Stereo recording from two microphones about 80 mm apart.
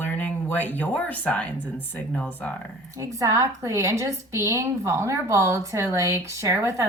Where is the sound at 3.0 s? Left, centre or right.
Right.